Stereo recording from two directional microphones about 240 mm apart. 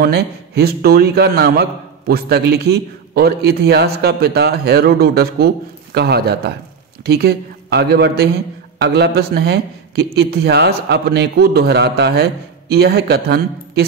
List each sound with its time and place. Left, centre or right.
0.0 s a man's voice: right